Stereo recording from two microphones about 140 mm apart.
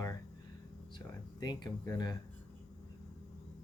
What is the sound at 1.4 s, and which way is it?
Speech, 30° left (ahead or behind).